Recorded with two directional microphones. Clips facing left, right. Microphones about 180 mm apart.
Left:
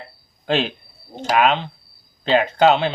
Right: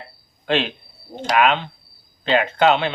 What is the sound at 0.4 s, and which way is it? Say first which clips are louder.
A man's voice: even; 35° left (ahead or behind).